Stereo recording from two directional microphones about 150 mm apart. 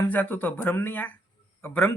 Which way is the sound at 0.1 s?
10° left (ahead or behind).